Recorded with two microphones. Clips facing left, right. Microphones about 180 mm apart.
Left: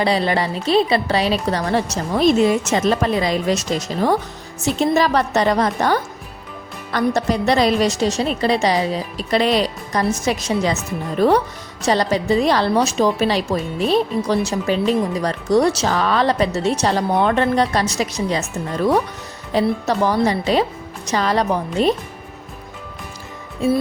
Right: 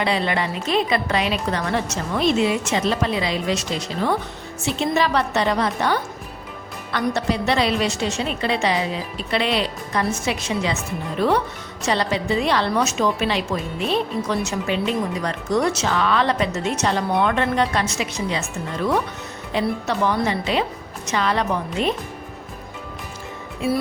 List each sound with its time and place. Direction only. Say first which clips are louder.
0.0 s speech: left 4 dB; 35° left (ahead or behind)